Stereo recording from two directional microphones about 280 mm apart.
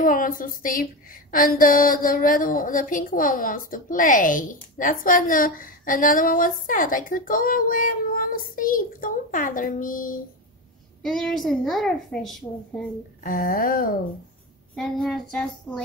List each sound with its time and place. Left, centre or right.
0.0 s a woman's voice: left
11.0 s a woman's voice: centre
13.2 s a sound: left
14.8 s a woman's voice: centre